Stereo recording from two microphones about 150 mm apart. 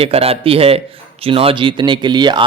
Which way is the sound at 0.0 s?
40° right (ahead or behind).